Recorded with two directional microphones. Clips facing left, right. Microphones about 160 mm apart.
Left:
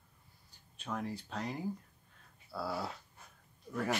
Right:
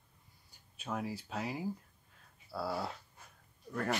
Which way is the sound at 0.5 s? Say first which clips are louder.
Right 1 dB; 10° right (ahead or behind).